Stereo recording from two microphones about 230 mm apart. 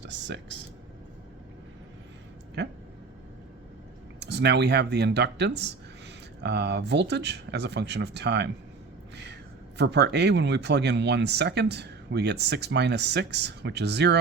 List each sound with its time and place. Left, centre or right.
0.0 s speech: right
4.2 s a man's voice: right